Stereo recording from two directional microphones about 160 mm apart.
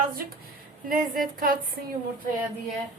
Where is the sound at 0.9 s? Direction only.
60° right (ahead or behind).